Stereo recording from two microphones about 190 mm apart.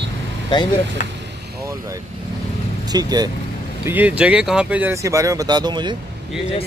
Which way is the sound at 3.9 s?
10° right (ahead or behind).